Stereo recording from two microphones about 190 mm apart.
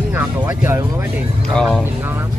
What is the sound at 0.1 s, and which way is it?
Speech, 10° right (ahead or behind).